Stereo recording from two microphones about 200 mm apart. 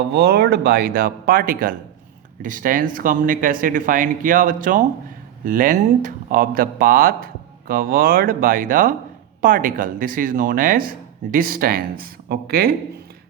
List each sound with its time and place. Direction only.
0.1 s speech: 55° right (ahead or behind)